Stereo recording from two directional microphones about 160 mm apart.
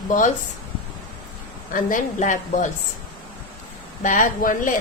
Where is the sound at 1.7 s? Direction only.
55° left (ahead or behind).